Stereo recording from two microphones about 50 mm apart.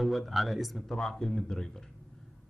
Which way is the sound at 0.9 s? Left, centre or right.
Centre.